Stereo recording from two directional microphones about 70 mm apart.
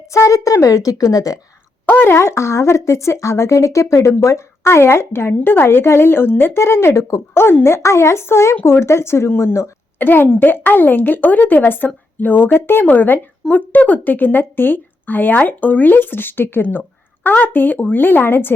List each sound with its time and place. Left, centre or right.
0.1 s a woman's voice: left
1.9 s a woman's voice: left
10.0 s a woman's voice: left